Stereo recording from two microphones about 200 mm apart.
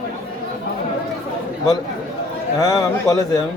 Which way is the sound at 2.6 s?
15° left (ahead or behind).